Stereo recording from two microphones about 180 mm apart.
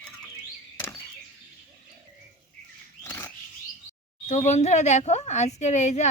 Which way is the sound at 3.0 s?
15° left (ahead or behind).